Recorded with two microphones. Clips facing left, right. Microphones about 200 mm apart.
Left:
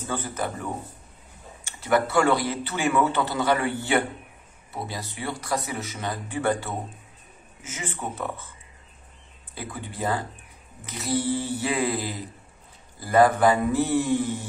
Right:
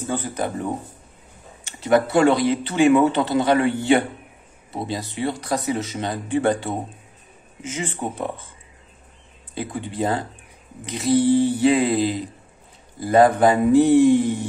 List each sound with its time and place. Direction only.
0.3 s speech: 20° right (ahead or behind)
9.6 s speech: 25° right (ahead or behind)